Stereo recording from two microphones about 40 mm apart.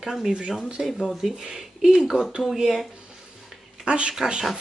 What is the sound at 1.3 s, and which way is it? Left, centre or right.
Speech, centre.